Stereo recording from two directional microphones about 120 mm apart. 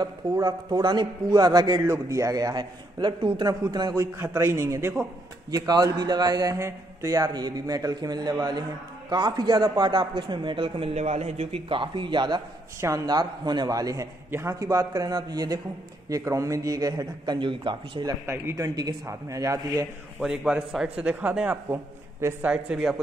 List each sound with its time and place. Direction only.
0.0 s a man's voice: 35° right (ahead or behind)
4.0 s a man's voice: 25° right (ahead or behind); by 12.4 s 40° right (ahead or behind)
12.8 s a man's voice: 30° right (ahead or behind)
18.2 s a man's voice: 25° right (ahead or behind)
20.2 s speech: 5° right (ahead or behind)